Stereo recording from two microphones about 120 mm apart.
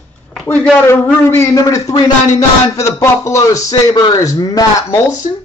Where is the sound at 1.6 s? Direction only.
30° left (ahead or behind).